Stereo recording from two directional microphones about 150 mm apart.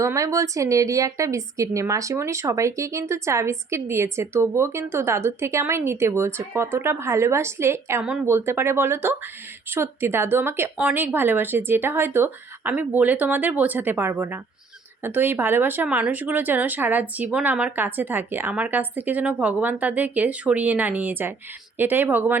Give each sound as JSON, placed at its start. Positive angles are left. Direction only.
{"t": 0.0, "sound": "a woman's voice", "side_deg": -20}